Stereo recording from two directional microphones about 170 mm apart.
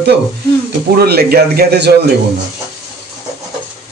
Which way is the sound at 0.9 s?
70° right (ahead or behind).